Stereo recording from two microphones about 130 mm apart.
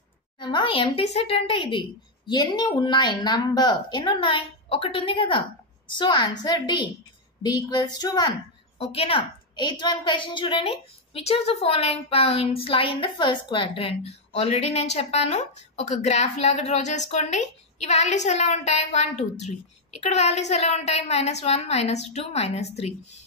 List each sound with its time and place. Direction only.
0.4 s a woman's voice: 35° left (ahead or behind)
8.7 s a woman's voice: 50° left (ahead or behind)